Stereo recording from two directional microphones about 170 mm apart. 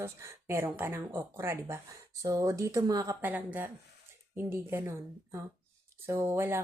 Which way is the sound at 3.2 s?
10° right (ahead or behind).